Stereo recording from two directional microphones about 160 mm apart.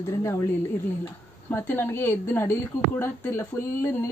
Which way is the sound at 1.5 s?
15° left (ahead or behind).